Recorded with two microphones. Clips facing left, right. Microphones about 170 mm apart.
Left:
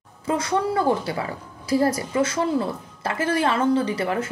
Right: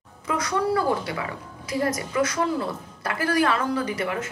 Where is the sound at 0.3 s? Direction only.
25° left (ahead or behind).